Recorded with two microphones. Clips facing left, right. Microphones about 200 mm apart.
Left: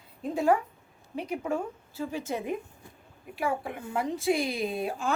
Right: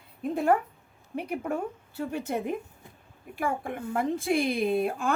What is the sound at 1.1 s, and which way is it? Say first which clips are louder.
Speech: even; 55° right (ahead or behind).